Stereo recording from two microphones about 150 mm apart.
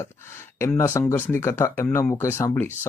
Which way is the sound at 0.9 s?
10° left (ahead or behind).